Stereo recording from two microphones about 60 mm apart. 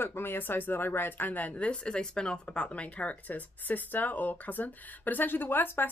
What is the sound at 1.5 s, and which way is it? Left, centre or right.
Speech, centre.